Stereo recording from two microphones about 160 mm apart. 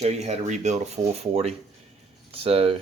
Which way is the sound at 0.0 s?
45° right (ahead or behind).